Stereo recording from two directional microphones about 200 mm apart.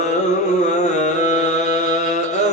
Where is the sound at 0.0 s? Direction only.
35° left (ahead or behind).